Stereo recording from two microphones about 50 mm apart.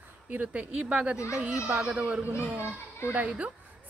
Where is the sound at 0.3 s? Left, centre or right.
Right.